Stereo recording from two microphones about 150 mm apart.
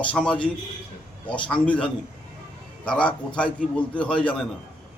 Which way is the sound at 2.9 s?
5° left (ahead or behind).